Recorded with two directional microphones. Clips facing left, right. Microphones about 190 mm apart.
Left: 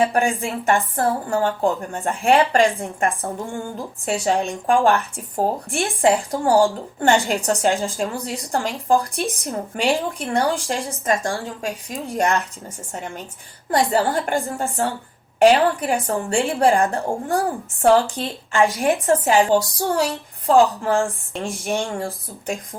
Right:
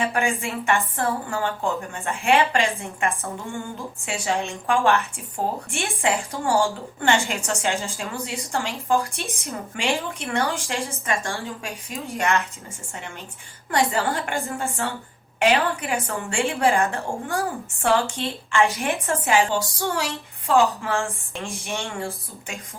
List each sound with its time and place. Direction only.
0.0 s a woman's voice: 35° left (ahead or behind)